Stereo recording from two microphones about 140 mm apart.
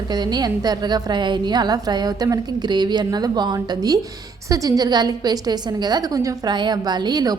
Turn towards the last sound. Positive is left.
turn(degrees=-30)  # may be behind; listen again after turning